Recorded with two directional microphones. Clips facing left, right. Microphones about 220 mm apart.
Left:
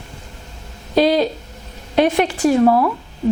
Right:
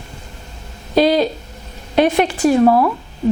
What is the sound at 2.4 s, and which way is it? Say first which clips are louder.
Speech: right 1 dB; 30° right (ahead or behind).